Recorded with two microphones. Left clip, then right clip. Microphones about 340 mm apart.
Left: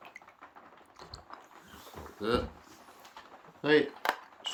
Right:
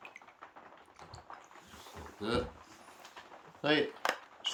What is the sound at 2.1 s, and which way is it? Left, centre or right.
Speech, centre.